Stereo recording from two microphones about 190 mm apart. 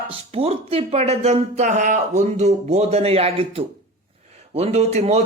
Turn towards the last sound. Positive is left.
turn(degrees=-35)  # may be behind; listen again after turning